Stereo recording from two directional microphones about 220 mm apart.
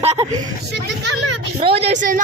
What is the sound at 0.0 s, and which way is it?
Speech, 30° right (ahead or behind).